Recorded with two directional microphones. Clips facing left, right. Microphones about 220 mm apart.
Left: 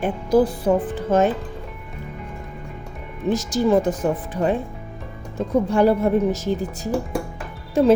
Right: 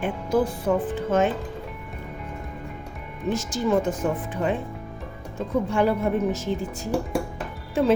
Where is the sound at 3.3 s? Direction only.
35° left (ahead or behind).